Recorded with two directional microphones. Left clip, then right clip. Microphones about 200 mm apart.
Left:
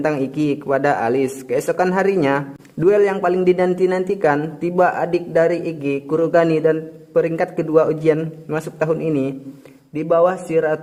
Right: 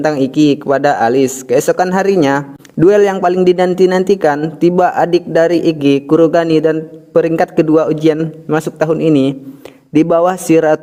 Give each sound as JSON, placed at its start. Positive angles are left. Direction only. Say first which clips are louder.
{"t": 0.0, "sound": "a man's voice", "louder": "right 8 dB", "side_deg": -25}